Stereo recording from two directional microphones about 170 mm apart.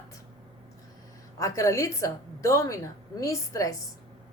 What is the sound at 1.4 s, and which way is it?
Speech, 20° left (ahead or behind).